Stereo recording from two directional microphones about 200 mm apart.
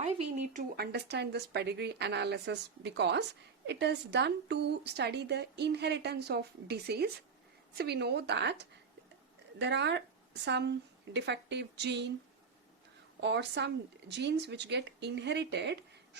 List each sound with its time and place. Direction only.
0.0 s speech: 35° right (ahead or behind)
0.8 s a woman's voice: 55° right (ahead or behind)
9.6 s a woman's voice: 60° right (ahead or behind)
13.2 s a woman's voice: 60° right (ahead or behind)